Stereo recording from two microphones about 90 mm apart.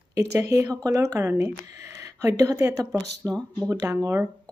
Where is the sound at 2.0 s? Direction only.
35° right (ahead or behind).